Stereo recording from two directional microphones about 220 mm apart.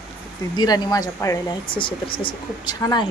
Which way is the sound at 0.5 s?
20° left (ahead or behind).